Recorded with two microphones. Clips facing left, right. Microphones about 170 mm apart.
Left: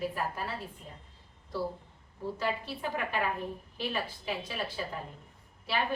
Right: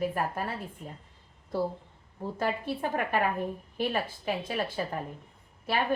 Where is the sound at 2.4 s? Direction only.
50° right (ahead or behind).